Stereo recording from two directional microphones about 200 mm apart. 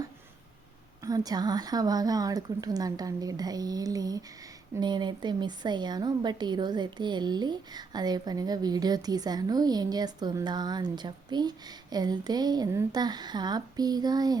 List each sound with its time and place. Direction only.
1.0 s a woman's voice: 20° right (ahead or behind)